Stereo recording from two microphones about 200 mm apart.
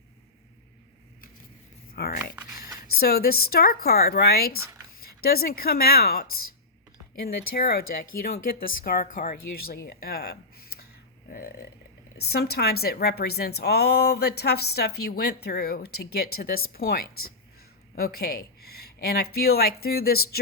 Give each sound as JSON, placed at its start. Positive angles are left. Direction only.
{"t": 2.0, "sound": "a woman's voice", "side_deg": 50}
{"t": 11.3, "sound": "a sound", "side_deg": 50}
{"t": 12.3, "sound": "a woman's voice", "side_deg": 50}